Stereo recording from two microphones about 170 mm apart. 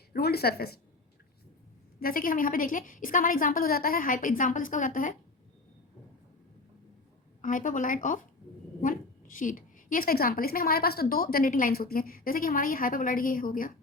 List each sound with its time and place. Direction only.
0.1 s speech: 65° left (ahead or behind)
2.0 s a woman's voice: 55° left (ahead or behind)
7.4 s a woman's voice: 50° left (ahead or behind)